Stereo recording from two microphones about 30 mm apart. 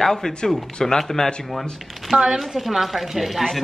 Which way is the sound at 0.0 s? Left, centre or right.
Centre.